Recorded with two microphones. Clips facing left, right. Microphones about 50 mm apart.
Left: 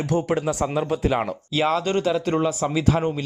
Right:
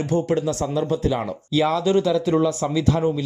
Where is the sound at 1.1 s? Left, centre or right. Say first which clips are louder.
Left 1 dB; left.